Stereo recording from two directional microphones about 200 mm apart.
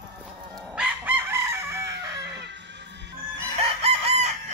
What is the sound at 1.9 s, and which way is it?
Music, 60° right (ahead or behind).